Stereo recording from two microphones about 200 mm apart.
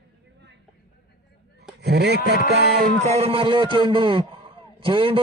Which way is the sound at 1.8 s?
55° right (ahead or behind).